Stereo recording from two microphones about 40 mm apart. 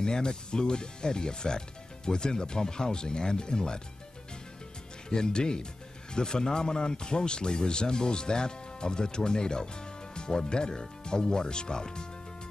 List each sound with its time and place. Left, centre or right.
0.0 s speech: centre
5.1 s speech: centre